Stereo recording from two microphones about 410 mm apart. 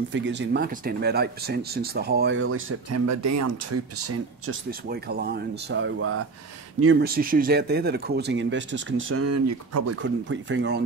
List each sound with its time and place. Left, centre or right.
0.1 s speech: right
4.6 s speech: right